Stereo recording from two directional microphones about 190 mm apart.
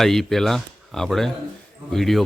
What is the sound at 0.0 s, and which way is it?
Speech, centre (ahead or behind).